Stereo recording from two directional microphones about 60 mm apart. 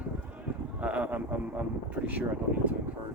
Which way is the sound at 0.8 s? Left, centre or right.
Right.